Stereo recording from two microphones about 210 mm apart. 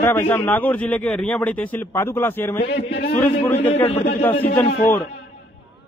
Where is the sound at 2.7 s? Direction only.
55° left (ahead or behind).